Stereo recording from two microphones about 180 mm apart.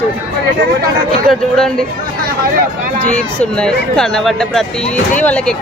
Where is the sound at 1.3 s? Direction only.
5° left (ahead or behind).